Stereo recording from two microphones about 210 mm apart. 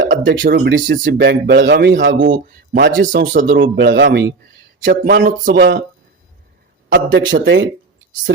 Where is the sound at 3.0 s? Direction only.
40° right (ahead or behind).